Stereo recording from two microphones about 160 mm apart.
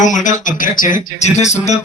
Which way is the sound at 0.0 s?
50° left (ahead or behind).